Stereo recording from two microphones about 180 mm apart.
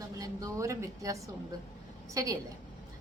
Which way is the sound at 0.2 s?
20° right (ahead or behind).